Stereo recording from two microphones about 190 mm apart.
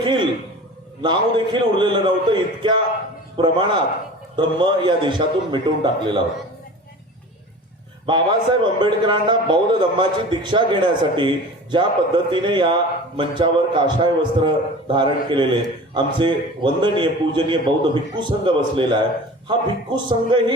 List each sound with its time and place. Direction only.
0.0 s a sound: 25° right (ahead or behind)
1.0 s a man's voice: 25° right (ahead or behind)
8.0 s a man's voice: 25° right (ahead or behind)